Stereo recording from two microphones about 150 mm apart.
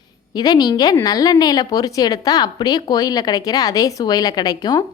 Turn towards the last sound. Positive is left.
turn(degrees=25)  # may be behind; listen again after turning